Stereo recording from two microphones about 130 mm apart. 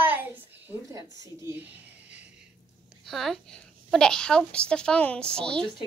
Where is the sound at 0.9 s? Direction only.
25° right (ahead or behind).